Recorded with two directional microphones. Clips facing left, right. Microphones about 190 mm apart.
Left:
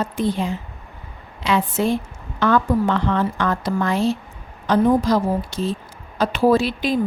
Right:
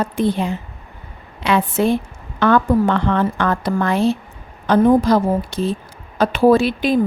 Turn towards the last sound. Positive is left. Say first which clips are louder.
# right 4 dB
turn(degrees=-55)  # may be behind; listen again after turning